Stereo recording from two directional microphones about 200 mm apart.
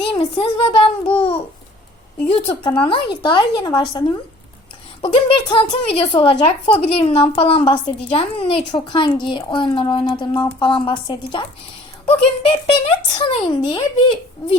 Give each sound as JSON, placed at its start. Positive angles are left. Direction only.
{"t": 0.1, "sound": "a child's voice", "side_deg": 25}